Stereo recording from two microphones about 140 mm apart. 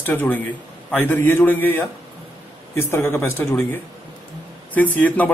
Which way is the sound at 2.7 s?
15° left (ahead or behind).